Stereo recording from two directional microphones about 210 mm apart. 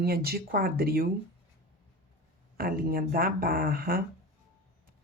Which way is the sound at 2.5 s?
45° right (ahead or behind).